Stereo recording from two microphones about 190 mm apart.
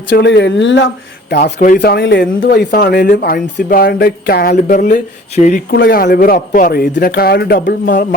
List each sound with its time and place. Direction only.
0.1 s speech: 65° left (ahead or behind)
1.3 s speech: 60° left (ahead or behind)
1.5 s a man's voice: 45° left (ahead or behind)
5.7 s a man's voice: 50° left (ahead or behind)